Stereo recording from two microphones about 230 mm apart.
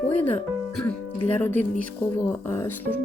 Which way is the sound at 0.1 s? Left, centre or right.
Centre.